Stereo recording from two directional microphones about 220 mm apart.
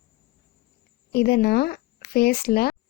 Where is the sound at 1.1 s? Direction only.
45° left (ahead or behind).